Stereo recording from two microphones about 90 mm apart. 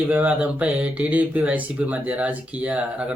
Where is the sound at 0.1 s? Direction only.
15° right (ahead or behind).